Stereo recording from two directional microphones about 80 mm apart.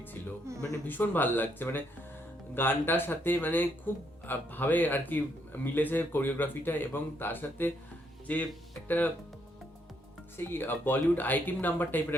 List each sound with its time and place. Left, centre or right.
0.5 s speech: right
0.9 s speech: left
10.3 s speech: left